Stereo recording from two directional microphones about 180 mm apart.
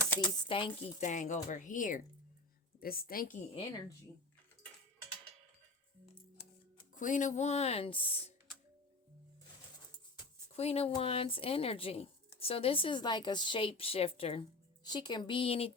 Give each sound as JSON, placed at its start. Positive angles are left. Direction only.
{"t": 0.4, "sound": "speech", "side_deg": 30}
{"t": 0.9, "sound": "speech", "side_deg": 40}
{"t": 2.8, "sound": "speech", "side_deg": 55}
{"t": 3.5, "sound": "speech", "side_deg": 25}
{"t": 6.3, "sound": "speech", "side_deg": 35}
{"t": 10.5, "sound": "speech", "side_deg": 35}